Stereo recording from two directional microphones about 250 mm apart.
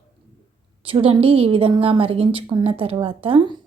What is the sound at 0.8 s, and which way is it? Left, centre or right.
Speech, right.